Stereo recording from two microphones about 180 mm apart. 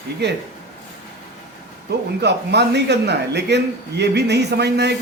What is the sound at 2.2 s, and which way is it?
A man's voice, 70° right (ahead or behind).